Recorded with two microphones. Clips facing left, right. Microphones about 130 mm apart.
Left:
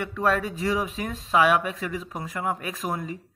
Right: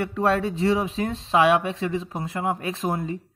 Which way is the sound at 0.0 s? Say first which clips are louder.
Right 2 dB; 30° right (ahead or behind).